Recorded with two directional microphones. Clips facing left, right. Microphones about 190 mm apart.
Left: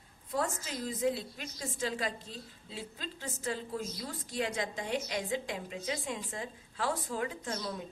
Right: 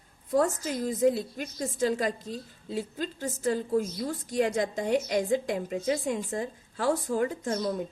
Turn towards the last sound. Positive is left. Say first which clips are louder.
# right 9 dB
turn(degrees=-45)  # may be behind; listen again after turning